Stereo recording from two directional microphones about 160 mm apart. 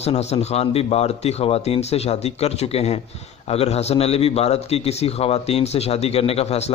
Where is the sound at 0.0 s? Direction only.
40° left (ahead or behind).